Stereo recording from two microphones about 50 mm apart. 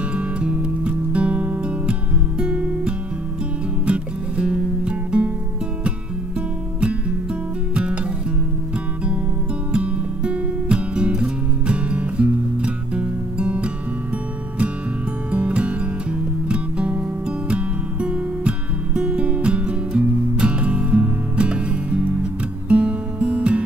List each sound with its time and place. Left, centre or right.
0.1 s music: right
3.8 s music: right
6.8 s music: right
9.7 s music: right
15.3 s music: right